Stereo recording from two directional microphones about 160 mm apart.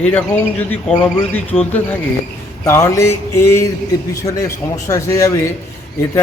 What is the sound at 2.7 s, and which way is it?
Speech, 15° left (ahead or behind).